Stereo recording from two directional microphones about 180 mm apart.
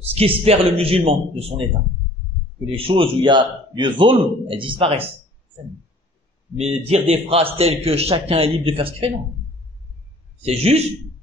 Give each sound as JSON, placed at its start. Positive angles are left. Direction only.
{"t": 0.1, "sound": "a man's voice", "side_deg": -35}
{"t": 2.6, "sound": "a man's voice", "side_deg": -30}
{"t": 6.5, "sound": "a man's voice", "side_deg": -35}
{"t": 10.4, "sound": "a man's voice", "side_deg": -35}